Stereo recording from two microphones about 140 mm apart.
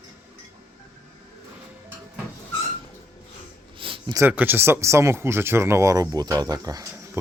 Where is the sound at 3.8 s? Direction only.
40° right (ahead or behind).